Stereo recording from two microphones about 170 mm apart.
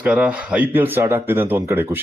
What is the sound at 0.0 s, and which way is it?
Speech, 5° right (ahead or behind).